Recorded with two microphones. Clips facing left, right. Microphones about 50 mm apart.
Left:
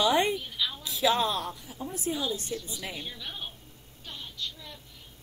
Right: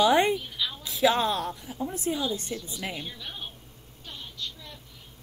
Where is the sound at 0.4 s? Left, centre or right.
Centre.